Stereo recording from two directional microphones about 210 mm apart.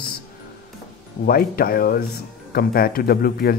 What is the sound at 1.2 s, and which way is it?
Speech, 45° left (ahead or behind).